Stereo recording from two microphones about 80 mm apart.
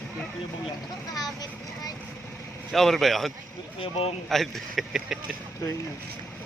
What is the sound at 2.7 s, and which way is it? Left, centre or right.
Speech, centre.